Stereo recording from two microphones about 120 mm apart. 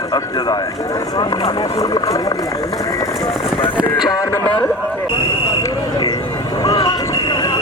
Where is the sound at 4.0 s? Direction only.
35° left (ahead or behind).